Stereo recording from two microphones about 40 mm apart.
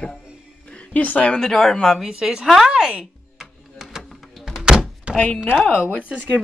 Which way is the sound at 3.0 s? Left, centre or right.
Centre.